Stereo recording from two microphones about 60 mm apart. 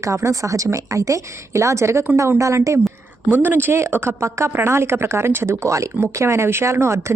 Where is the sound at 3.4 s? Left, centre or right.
Right.